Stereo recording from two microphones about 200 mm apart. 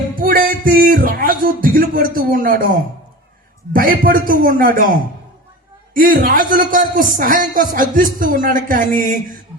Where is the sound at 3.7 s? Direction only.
45° right (ahead or behind).